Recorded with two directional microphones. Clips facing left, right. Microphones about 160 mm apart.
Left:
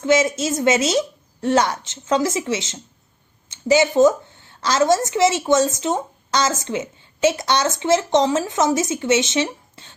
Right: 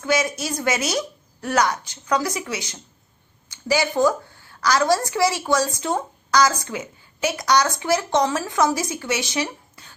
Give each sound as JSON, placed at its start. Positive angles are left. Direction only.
{"t": 0.0, "sound": "a woman's voice", "side_deg": 25}